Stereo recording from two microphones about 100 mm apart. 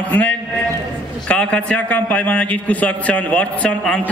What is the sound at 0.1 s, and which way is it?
A man's voice, 15° left (ahead or behind).